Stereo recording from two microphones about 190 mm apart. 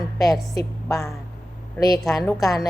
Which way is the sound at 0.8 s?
Centre (ahead or behind).